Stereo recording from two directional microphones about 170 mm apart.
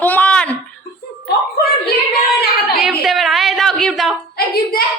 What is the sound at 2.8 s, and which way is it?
A woman's voice, centre (ahead or behind).